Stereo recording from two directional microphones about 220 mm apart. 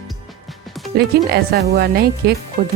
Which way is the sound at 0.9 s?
45° right (ahead or behind).